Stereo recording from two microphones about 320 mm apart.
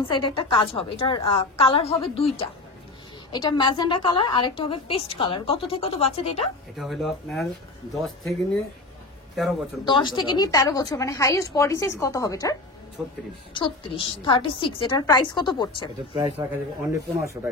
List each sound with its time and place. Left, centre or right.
0.0 s a woman's voice: centre
3.3 s a woman's voice: centre
6.8 s speech: centre
9.8 s a woman's voice: centre
13.0 s speech: centre
13.5 s a woman's voice: centre
16.2 s speech: centre